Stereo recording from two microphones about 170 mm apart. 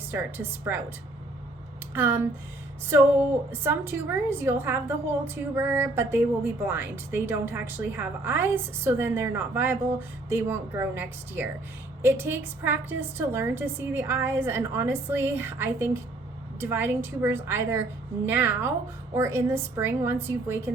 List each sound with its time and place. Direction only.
0.1 s a woman's voice: 10° right (ahead or behind)
1.9 s speech: 15° right (ahead or behind)
3.5 s a woman's voice: 15° right (ahead or behind)